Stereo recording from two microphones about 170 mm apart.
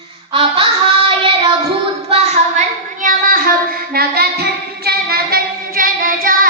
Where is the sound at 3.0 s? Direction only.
55° right (ahead or behind).